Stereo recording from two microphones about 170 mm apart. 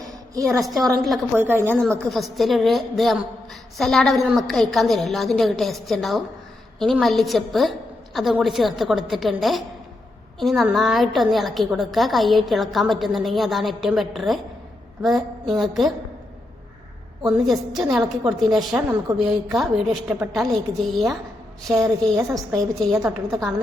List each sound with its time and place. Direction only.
0.6 s a woman's voice: centre (ahead or behind)
1.4 s a woman's voice: 15° right (ahead or behind)
1.8 s a woman's voice: centre (ahead or behind)
17.3 s a woman's voice: centre (ahead or behind)
21.8 s a woman's voice: 20° right (ahead or behind)